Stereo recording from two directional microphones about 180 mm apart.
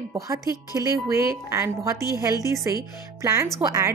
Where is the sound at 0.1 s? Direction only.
20° right (ahead or behind).